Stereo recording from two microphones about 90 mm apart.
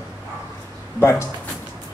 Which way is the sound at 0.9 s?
25° left (ahead or behind).